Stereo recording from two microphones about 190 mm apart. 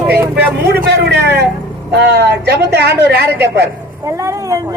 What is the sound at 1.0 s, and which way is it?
Speech, 60° right (ahead or behind).